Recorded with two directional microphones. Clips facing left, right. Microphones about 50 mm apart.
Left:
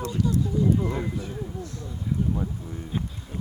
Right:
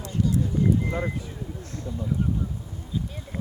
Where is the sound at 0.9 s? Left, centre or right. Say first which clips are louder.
Right 1 dB; right.